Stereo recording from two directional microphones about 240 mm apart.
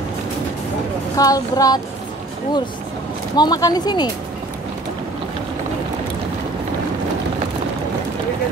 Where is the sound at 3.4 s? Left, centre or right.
Centre.